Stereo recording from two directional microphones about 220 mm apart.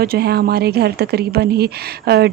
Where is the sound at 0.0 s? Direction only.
45° right (ahead or behind).